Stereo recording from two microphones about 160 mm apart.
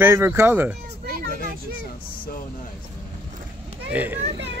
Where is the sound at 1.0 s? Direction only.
65° right (ahead or behind).